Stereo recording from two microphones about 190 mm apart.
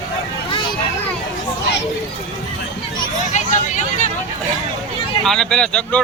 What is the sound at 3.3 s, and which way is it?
Vehicle, 40° left (ahead or behind).